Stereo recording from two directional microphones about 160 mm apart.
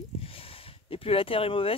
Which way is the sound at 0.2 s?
35° left (ahead or behind).